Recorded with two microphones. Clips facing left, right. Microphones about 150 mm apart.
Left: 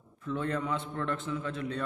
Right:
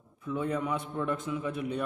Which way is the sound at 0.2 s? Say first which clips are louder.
Right 1 dB; 10° right (ahead or behind).